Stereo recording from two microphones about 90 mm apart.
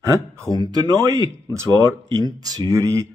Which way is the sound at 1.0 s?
35° right (ahead or behind).